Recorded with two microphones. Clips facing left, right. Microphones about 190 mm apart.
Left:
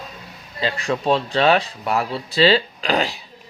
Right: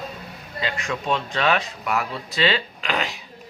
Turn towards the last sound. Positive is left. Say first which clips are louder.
# left 5 dB
turn(degrees=35)  # may be behind; listen again after turning